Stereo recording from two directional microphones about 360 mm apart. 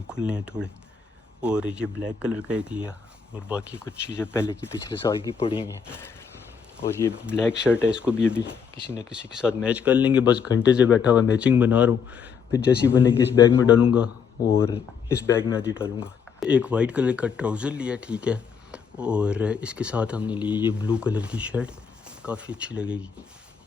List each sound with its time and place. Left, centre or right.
0.1 s speech: centre
3.8 s speech: centre
7.1 s speech: centre
7.3 s speech: centre
12.5 s speech: centre
16.4 s speech: centre